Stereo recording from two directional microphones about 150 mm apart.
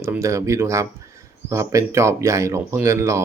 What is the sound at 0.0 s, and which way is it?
Speech, 20° right (ahead or behind).